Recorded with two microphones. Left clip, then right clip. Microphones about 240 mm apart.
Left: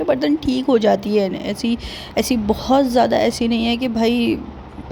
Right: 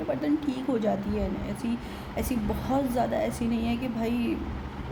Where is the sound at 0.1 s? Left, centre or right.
Left.